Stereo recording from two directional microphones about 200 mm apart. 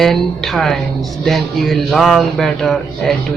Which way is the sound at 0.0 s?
Centre (ahead or behind).